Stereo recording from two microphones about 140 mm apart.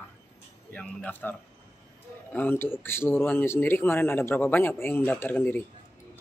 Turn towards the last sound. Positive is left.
turn(degrees=10)  # may be behind; listen again after turning